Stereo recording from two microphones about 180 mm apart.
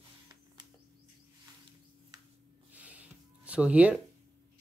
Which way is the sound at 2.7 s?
10° right (ahead or behind).